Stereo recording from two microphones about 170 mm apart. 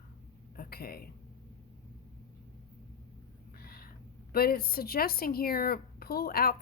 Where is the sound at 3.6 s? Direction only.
65° left (ahead or behind).